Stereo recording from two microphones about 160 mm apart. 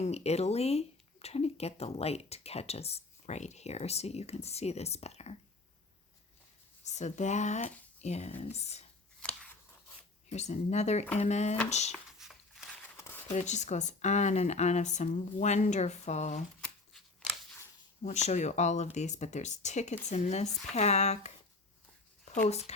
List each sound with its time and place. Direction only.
0.0 s speech: 40° left (ahead or behind)
6.8 s speech: 45° left (ahead or behind)
10.2 s speech: 45° left (ahead or behind)
11.9 s a sound: centre (ahead or behind)
13.0 s a sound: 15° left (ahead or behind)
13.3 s speech: 45° left (ahead or behind)
16.6 s scissors: 5° left (ahead or behind)
18.0 s speech: 45° left (ahead or behind)
22.4 s speech: 40° left (ahead or behind)